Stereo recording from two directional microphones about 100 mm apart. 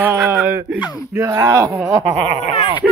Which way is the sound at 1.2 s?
35° right (ahead or behind).